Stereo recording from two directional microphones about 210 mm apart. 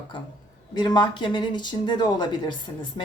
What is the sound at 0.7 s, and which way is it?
Speech, 20° left (ahead or behind).